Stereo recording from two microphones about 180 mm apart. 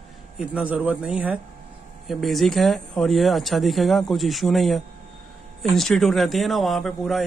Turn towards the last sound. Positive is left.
turn(degrees=0)  # may be behind; listen again after turning